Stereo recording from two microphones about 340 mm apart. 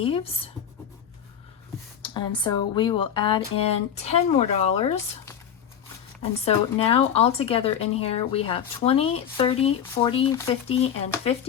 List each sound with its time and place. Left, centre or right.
0.0 s speech: centre
2.0 s speech: centre
6.4 s speech: centre